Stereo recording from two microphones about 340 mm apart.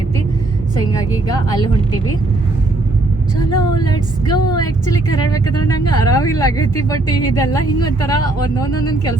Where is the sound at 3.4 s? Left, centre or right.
Left.